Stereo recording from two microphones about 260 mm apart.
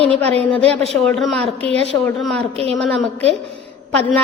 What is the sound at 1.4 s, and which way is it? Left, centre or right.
Speech, right.